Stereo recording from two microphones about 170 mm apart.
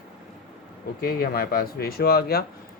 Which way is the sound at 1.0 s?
60° left (ahead or behind).